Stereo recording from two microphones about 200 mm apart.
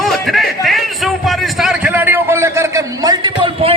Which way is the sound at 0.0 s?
Centre (ahead or behind).